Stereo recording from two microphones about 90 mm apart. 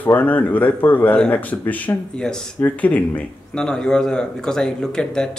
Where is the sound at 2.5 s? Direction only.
20° left (ahead or behind).